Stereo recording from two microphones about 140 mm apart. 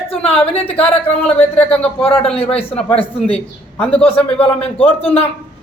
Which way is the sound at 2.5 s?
45° left (ahead or behind).